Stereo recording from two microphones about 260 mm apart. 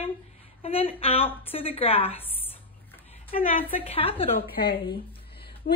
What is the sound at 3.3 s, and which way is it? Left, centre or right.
Speech, left.